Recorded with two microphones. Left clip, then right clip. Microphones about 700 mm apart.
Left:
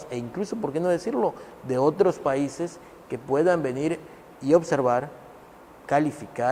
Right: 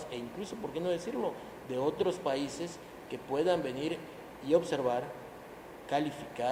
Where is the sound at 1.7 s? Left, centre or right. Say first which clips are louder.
Left 10 dB; left.